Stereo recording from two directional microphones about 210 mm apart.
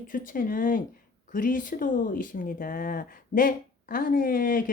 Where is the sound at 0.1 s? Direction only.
40° left (ahead or behind).